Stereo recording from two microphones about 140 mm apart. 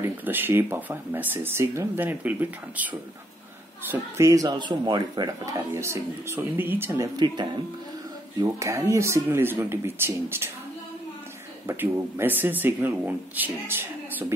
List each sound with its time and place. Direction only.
0.0 s speech: 15° right (ahead or behind)
8.4 s speech: 20° right (ahead or behind)
11.6 s speech: 15° right (ahead or behind)